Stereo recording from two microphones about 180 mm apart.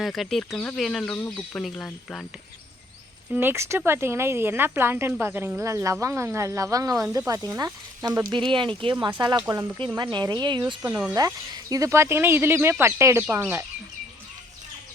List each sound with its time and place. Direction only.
0.0 s speech: centre (ahead or behind)
3.3 s speech: 15° right (ahead or behind)
10.8 s speech: 10° right (ahead or behind)
11.1 s speech: 20° right (ahead or behind)